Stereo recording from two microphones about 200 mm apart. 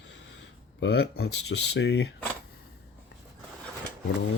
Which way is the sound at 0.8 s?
55° left (ahead or behind).